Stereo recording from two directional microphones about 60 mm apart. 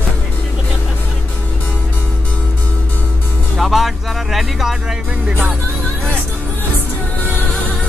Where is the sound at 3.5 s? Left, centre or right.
Centre.